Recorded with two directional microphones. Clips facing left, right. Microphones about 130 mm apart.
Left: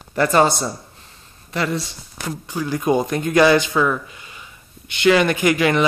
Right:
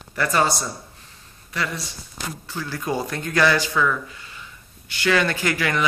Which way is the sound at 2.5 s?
15° left (ahead or behind).